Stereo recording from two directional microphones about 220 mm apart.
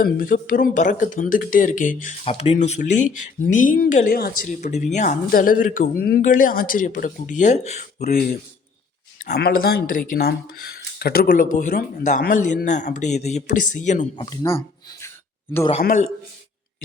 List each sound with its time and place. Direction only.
0.0 s speech: 40° left (ahead or behind)
2.2 s speech: 25° left (ahead or behind)
14.3 s speech: 15° left (ahead or behind)
15.8 s speech: 35° left (ahead or behind)